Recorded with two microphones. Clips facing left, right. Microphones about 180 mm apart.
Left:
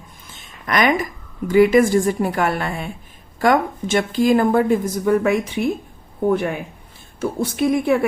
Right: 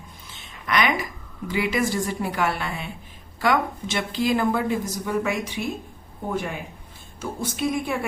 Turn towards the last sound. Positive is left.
turn(degrees=60)  # may be behind; listen again after turning